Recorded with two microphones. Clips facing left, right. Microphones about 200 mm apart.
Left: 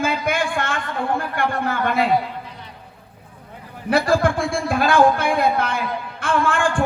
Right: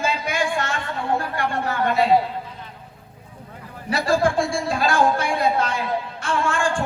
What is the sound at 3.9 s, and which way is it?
Speech, 55° left (ahead or behind).